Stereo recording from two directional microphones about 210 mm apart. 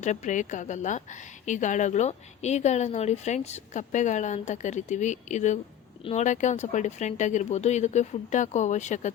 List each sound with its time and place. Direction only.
0.0 s a woman's voice: 35° left (ahead or behind)